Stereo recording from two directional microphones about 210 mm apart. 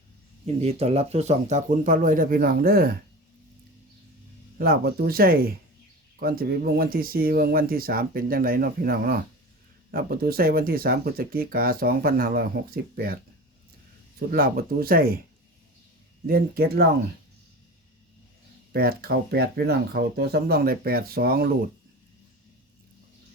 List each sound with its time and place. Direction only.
0.4 s speech: 30° right (ahead or behind); by 3.0 s 45° right (ahead or behind)
4.5 s speech: 45° right (ahead or behind)
14.2 s speech: 45° right (ahead or behind)
16.2 s speech: 45° right (ahead or behind)
18.7 s speech: 45° right (ahead or behind)